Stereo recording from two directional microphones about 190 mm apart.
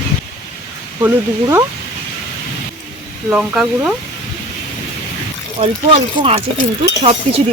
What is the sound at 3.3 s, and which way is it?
Speech, 5° right (ahead or behind).